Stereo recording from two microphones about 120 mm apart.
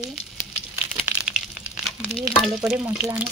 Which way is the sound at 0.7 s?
10° right (ahead or behind).